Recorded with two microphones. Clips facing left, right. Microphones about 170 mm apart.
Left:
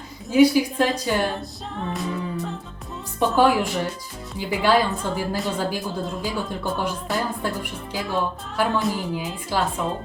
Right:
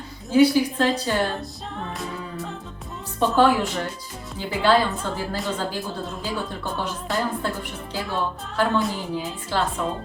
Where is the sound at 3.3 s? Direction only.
10° left (ahead or behind).